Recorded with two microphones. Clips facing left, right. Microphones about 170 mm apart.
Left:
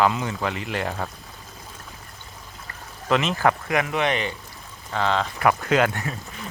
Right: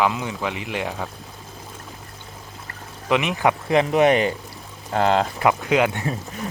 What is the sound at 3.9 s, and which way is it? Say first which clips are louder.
Speech: right 7 dB; 40° right (ahead or behind).